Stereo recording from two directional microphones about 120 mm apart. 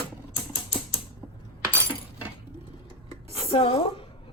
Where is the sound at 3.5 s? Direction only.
50° left (ahead or behind).